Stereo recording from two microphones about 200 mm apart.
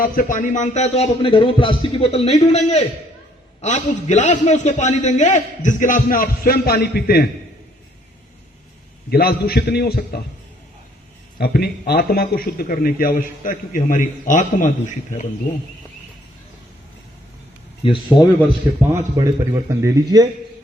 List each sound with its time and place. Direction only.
0.0 s a man's voice: 45° left (ahead or behind)
9.0 s a man's voice: 50° left (ahead or behind)
11.3 s a man's voice: 50° left (ahead or behind)
17.8 s speech: 25° left (ahead or behind)
18.9 s a man's voice: 15° right (ahead or behind)